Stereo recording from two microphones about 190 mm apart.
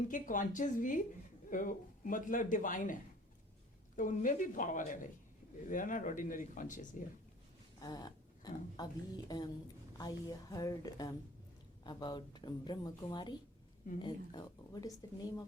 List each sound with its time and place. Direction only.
0.1 s a man's voice: 45° left (ahead or behind)
7.8 s speech: 20° left (ahead or behind)